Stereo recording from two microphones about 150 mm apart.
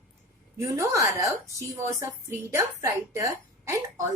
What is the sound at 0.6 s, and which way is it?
A woman's voice, 20° right (ahead or behind).